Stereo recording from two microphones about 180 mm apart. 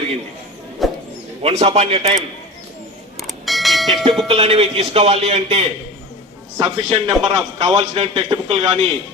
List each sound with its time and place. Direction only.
0.8 s a sound: centre (ahead or behind)
1.4 s a man's voice: 35° right (ahead or behind)
3.2 s bell: centre (ahead or behind)
4.3 s a man's voice: 35° right (ahead or behind)